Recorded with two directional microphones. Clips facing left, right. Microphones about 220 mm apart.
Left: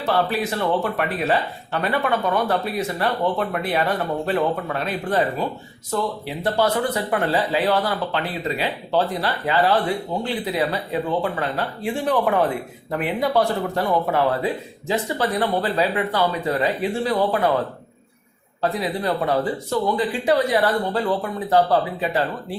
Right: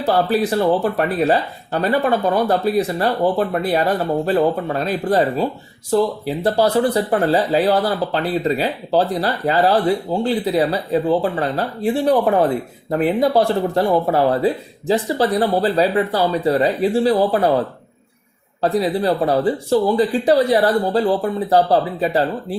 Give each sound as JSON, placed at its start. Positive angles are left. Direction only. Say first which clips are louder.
{"t": 0.0, "sound": "speech", "louder": "right 5 dB", "side_deg": -35}
{"t": 18.6, "sound": "speech", "louder": "right 6 dB", "side_deg": -35}